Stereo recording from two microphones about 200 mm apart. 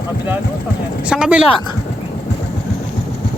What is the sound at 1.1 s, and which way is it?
Speech, 5° right (ahead or behind).